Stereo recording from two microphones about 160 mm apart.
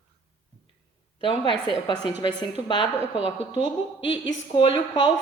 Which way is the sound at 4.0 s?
35° left (ahead or behind).